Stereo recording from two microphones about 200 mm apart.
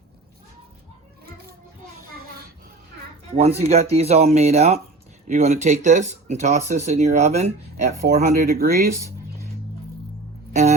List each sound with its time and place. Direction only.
3.3 s speech: 30° right (ahead or behind)
8.0 s speech: 50° right (ahead or behind)